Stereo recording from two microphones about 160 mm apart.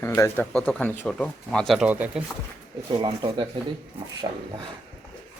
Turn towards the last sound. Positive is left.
turn(degrees=-30)  # may be behind; listen again after turning